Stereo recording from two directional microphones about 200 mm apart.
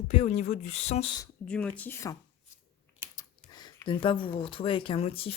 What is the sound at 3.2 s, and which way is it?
Speech, 20° left (ahead or behind).